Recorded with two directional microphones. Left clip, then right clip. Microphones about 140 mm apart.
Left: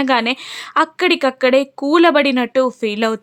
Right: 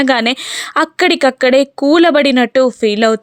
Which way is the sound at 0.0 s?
30° right (ahead or behind).